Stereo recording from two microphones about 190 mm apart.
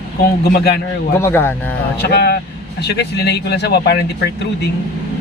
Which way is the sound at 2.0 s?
60° left (ahead or behind).